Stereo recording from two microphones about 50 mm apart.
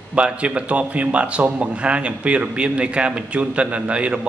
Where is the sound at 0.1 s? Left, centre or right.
Right.